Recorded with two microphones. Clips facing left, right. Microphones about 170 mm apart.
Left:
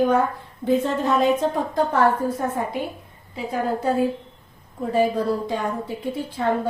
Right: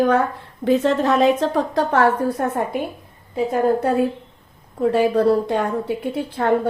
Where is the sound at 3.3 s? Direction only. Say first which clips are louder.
Right 7 dB; 60° right (ahead or behind).